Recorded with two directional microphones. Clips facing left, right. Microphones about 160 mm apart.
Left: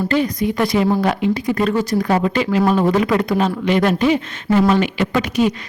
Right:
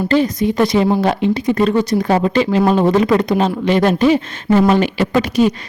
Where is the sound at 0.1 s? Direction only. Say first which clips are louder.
Right 3 dB; 30° right (ahead or behind).